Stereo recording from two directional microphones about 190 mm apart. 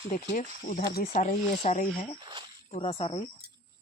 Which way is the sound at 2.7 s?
30° left (ahead or behind).